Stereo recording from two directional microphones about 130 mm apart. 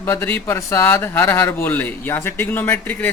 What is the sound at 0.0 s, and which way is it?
A man's voice, 20° left (ahead or behind).